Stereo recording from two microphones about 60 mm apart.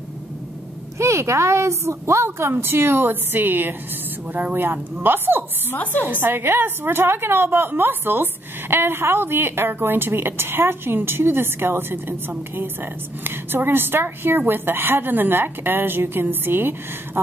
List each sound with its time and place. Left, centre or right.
0.9 s a woman's voice: right
4.6 s a woman's voice: right